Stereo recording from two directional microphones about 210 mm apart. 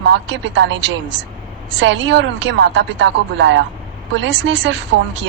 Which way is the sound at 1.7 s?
60° right (ahead or behind).